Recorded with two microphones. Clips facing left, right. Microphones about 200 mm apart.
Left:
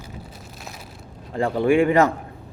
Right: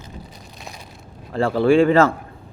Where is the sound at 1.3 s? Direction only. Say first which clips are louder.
Right 3 dB; 15° left (ahead or behind).